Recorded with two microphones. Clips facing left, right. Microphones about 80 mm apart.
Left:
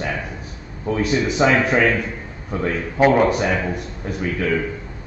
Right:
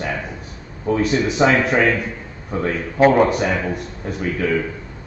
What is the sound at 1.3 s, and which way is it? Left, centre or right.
A man's voice, centre.